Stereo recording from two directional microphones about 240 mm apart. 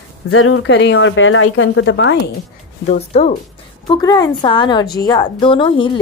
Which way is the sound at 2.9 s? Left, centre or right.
Left.